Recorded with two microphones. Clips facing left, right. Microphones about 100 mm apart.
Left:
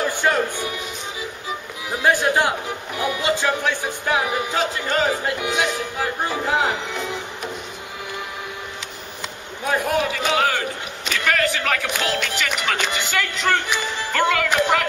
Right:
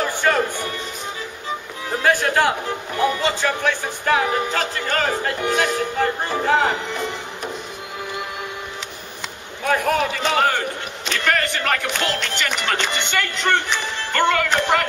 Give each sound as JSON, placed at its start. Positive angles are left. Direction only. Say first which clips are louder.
{"t": 0.2, "sound": "music", "louder": "right 3 dB", "side_deg": 10}
{"t": 1.9, "sound": "music", "louder": "even", "side_deg": 15}
{"t": 9.7, "sound": "a man's voice", "louder": "right 3 dB", "side_deg": 20}
{"t": 10.1, "sound": "speech", "louder": "right 1 dB", "side_deg": 0}